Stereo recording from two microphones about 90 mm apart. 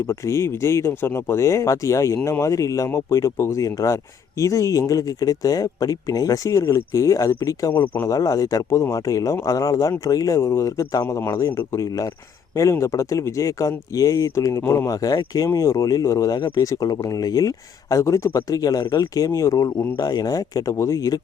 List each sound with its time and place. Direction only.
0.1 s speech: 30° left (ahead or behind)
7.7 s speech: 20° left (ahead or behind)
8.0 s speech: 40° left (ahead or behind)
20.0 s speech: 45° left (ahead or behind)